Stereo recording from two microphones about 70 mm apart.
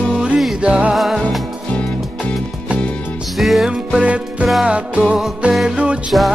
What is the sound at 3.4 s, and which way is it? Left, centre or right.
Music, centre.